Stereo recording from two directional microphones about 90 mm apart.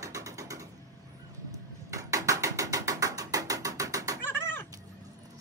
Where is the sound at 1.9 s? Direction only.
35° right (ahead or behind).